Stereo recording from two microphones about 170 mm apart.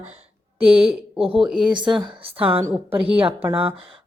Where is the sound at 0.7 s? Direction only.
5° right (ahead or behind).